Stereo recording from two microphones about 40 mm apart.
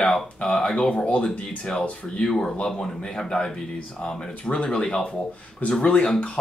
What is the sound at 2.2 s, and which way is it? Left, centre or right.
Speech, centre.